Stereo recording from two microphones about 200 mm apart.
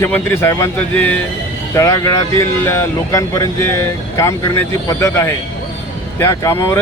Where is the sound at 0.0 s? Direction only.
10° left (ahead or behind).